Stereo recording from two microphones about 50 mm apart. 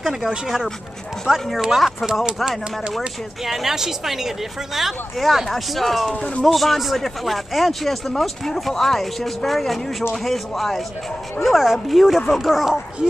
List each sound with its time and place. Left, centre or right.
0.0 s a woman's voice: centre
6.1 s speech: left
6.4 s speech: centre
11.4 s speech: centre